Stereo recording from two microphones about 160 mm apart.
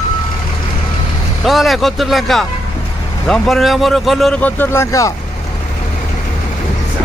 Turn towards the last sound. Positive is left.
turn(degrees=20)  # may be behind; listen again after turning